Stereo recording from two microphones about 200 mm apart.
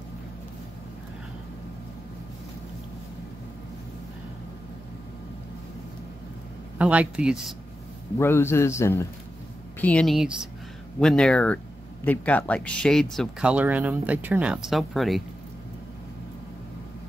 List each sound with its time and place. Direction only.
6.8 s speech: 5° right (ahead or behind)
8.2 s a man's voice: 10° left (ahead or behind)